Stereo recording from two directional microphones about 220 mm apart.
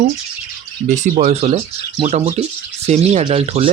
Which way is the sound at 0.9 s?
35° right (ahead or behind).